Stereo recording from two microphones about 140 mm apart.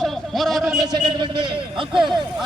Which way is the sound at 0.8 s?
35° right (ahead or behind).